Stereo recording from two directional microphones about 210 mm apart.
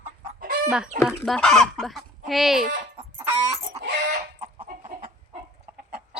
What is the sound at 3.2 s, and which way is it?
Chicken, 15° right (ahead or behind).